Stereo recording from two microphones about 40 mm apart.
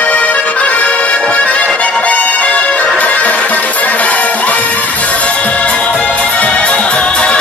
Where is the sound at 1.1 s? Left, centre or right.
Left.